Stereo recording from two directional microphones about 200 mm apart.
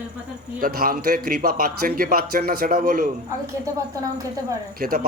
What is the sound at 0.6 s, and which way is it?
A man's voice, 45° right (ahead or behind).